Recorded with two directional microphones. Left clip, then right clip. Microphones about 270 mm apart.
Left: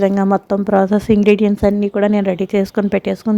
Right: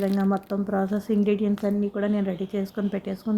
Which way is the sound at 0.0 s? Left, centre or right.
Left.